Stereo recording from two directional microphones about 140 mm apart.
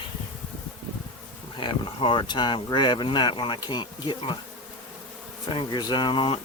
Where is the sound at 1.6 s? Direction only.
35° left (ahead or behind).